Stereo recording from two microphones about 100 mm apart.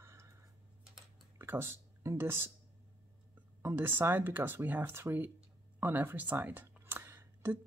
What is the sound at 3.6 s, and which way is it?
Speech, 20° right (ahead or behind).